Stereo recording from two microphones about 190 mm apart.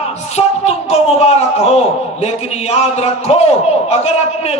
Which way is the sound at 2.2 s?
35° left (ahead or behind).